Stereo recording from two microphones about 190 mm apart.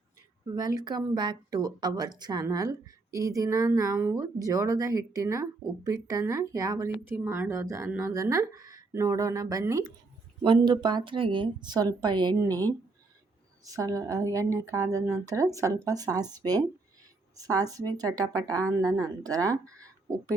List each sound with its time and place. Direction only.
0.5 s a woman's voice: 20° right (ahead or behind)
13.7 s a woman's voice: 15° right (ahead or behind)